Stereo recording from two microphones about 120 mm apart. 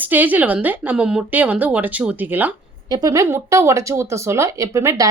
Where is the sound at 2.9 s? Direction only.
30° right (ahead or behind).